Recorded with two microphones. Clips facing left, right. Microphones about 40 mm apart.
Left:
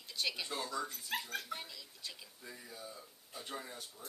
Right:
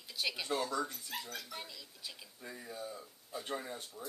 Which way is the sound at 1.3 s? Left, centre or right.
Left.